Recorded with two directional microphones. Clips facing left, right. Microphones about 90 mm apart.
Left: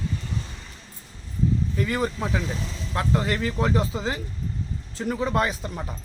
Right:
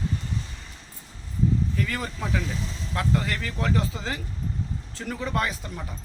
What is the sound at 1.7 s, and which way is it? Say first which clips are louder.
Speech: left 5 dB; 20° left (ahead or behind).